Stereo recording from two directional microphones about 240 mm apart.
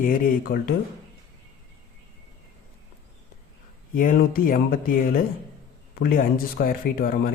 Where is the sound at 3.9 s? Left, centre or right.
Left.